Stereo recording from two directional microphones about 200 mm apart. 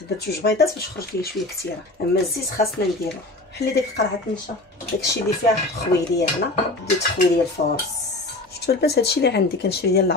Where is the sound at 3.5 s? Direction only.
55° left (ahead or behind).